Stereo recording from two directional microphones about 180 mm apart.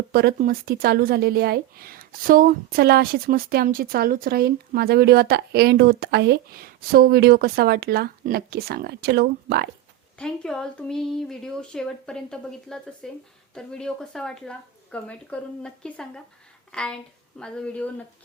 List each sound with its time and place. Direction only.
0.1 s a woman's voice: 60° right (ahead or behind)
10.2 s speech: 5° left (ahead or behind)